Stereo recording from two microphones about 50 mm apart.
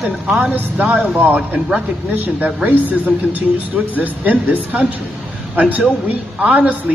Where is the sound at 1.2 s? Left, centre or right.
Right.